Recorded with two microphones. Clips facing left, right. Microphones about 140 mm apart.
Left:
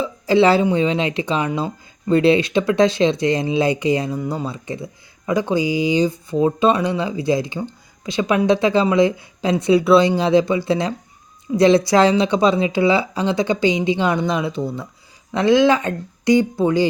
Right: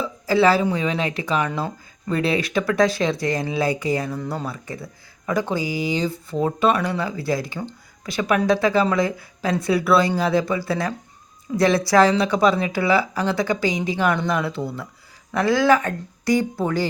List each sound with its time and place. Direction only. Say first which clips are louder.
0.0 s speech: left 3 dB; 20° left (ahead or behind)